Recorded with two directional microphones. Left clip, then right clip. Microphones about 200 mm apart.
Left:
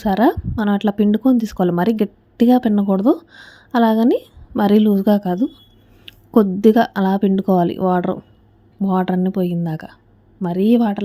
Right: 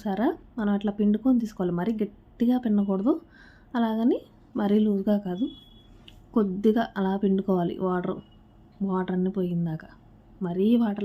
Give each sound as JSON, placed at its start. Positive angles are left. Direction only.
{"t": 0.0, "sound": "speech", "side_deg": 45}